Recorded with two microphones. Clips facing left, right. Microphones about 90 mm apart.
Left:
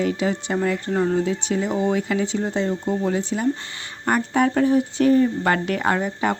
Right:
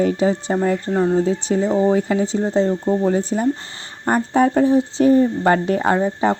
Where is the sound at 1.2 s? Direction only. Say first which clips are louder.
Right 4 dB; 35° right (ahead or behind).